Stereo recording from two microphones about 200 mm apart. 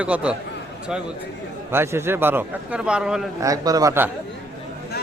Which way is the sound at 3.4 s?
15° right (ahead or behind).